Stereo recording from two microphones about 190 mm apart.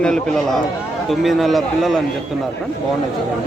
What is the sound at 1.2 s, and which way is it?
Speech, centre (ahead or behind).